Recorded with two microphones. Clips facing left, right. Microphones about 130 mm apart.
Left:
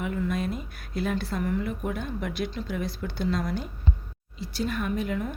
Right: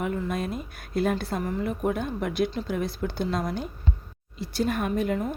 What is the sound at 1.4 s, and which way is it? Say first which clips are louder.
Speech: right 1 dB; 35° right (ahead or behind).